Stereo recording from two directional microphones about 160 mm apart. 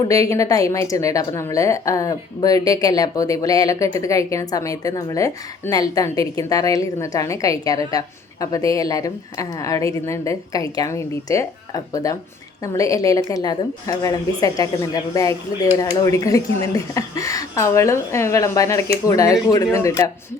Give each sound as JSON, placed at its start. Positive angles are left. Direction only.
{"t": 0.1, "sound": "a woman's voice", "side_deg": 20}